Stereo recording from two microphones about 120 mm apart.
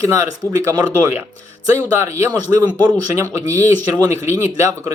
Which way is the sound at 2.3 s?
35° right (ahead or behind).